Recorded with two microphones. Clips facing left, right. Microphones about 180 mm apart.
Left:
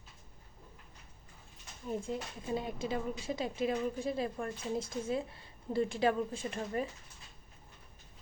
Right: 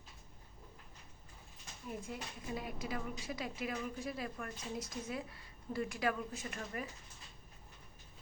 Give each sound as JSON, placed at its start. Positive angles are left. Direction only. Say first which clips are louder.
{"t": 1.9, "sound": "a woman's voice", "louder": "left 7 dB", "side_deg": 30}